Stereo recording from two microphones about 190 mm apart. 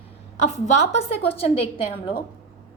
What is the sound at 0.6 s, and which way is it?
A woman's voice, 35° left (ahead or behind).